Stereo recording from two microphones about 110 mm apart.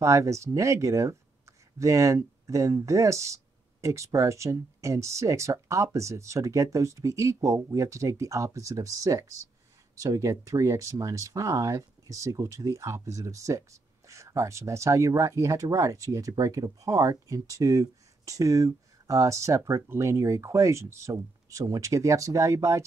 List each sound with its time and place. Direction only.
0.0 s speech: 30° right (ahead or behind)